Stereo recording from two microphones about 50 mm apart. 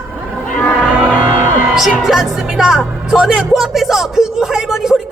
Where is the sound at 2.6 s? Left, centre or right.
Centre.